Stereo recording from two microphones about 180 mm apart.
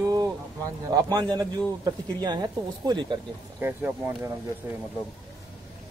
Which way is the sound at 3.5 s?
10° right (ahead or behind).